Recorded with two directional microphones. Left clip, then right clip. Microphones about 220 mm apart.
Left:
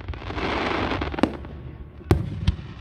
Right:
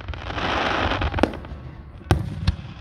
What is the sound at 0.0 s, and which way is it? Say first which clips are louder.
Fireworks: right 2 dB; 5° right (ahead or behind).